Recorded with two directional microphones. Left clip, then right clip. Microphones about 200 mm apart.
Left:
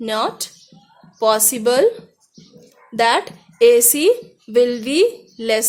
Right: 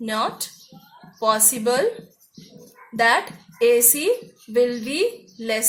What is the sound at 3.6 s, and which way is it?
A woman's voice, 55° left (ahead or behind).